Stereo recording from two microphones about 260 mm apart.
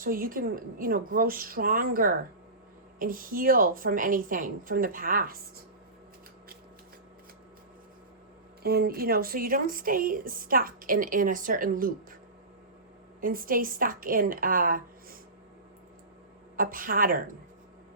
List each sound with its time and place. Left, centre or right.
0.0 s speech: right
8.6 s speech: right
13.2 s speech: right
16.6 s speech: right